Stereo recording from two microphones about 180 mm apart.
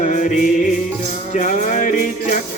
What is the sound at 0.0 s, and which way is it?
Music, 45° left (ahead or behind).